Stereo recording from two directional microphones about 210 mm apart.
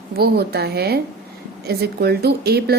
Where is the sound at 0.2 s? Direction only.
50° right (ahead or behind).